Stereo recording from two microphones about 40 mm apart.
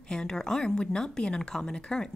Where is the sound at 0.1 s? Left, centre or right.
Centre.